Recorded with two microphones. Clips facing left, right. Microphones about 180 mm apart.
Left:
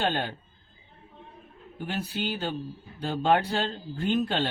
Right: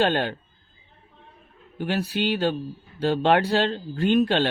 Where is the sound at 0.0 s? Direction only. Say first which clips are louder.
Right 6 dB; 80° right.